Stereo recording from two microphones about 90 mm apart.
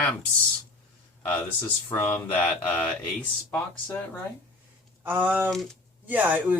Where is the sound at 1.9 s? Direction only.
20° left (ahead or behind).